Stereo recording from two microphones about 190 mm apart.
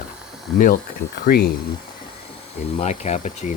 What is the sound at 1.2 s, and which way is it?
Speech, 55° left (ahead or behind).